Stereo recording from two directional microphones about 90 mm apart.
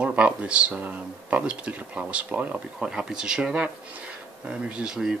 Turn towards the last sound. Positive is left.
turn(degrees=-10)  # may be behind; listen again after turning